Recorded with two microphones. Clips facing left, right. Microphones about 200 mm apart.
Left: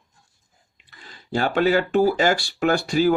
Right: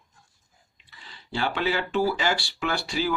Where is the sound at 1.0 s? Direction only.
45° left (ahead or behind).